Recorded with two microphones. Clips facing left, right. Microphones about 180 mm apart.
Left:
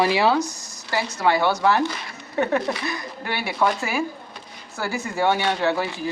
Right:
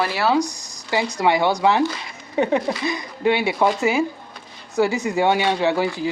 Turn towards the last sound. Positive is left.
turn(degrees=-15)  # may be behind; listen again after turning